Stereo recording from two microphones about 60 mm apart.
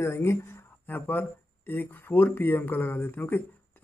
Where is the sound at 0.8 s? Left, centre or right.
Left.